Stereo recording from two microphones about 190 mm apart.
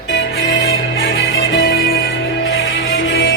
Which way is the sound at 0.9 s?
90° left.